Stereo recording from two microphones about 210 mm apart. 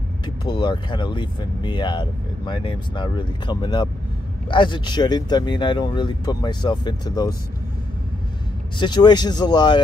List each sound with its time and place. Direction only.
0.5 s speech: 20° left (ahead or behind)
8.7 s speech: 20° left (ahead or behind)